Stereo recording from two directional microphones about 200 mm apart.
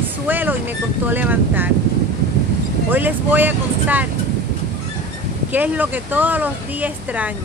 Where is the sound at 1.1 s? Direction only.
10° right (ahead or behind).